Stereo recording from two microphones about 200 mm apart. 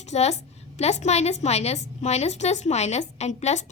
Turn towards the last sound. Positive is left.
turn(degrees=35)  # may be behind; listen again after turning